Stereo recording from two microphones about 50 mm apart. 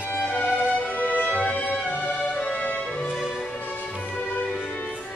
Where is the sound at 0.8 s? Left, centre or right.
Left.